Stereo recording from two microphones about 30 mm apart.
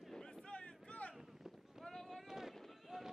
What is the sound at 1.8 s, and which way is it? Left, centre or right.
Run, centre.